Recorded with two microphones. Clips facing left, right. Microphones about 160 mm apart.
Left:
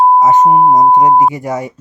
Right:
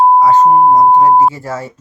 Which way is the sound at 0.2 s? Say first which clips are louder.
Even; 20° left (ahead or behind).